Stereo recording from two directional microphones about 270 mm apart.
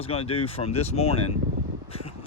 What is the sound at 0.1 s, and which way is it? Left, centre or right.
Speech, left.